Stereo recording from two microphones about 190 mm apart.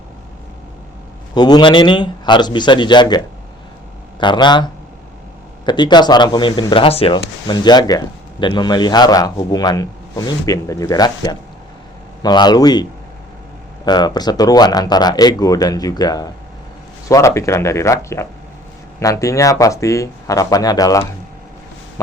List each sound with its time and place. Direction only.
1.3 s speech: 20° left (ahead or behind)
4.2 s speech: 25° left (ahead or behind)
13.8 s speech: 20° left (ahead or behind)